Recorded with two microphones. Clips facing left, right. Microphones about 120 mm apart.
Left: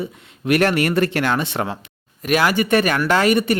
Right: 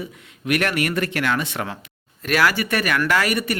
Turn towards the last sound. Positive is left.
turn(degrees=25)  # may be behind; listen again after turning